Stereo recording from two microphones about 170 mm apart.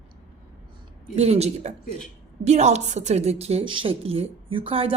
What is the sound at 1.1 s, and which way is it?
A woman's voice, 40° right (ahead or behind).